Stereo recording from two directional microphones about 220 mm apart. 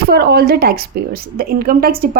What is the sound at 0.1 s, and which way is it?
A woman's voice, 45° right (ahead or behind).